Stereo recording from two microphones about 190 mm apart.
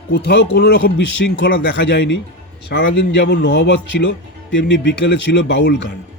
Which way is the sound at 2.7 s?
55° left (ahead or behind).